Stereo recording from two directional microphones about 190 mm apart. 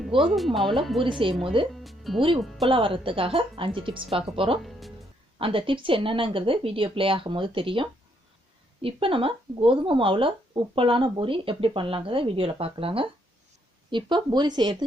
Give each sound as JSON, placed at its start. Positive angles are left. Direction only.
{"t": 0.2, "sound": "speech", "side_deg": 0}
{"t": 1.0, "sound": "speech", "side_deg": -25}
{"t": 1.7, "sound": "speech", "side_deg": 0}
{"t": 2.6, "sound": "speech", "side_deg": -30}
{"t": 4.6, "sound": "speech", "side_deg": 0}
{"t": 5.4, "sound": "speech", "side_deg": -30}